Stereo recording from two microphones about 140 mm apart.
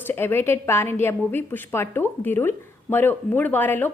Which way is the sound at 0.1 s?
15° left (ahead or behind).